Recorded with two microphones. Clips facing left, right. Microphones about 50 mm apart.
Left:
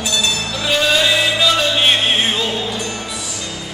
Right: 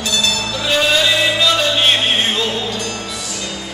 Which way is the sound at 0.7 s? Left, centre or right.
Centre.